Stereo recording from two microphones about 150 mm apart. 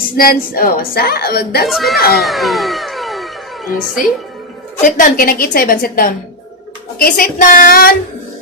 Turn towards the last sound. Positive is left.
turn(degrees=70)  # may be behind; listen again after turning